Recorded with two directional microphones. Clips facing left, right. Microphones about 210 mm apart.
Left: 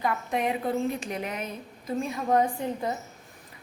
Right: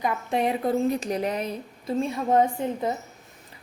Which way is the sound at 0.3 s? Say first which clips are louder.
Right 6 dB; 35° right (ahead or behind).